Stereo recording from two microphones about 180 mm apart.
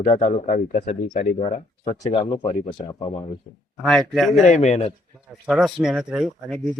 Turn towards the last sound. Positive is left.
turn(degrees=0)  # may be behind; listen again after turning